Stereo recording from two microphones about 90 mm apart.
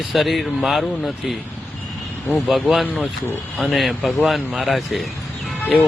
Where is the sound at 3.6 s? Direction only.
Centre (ahead or behind).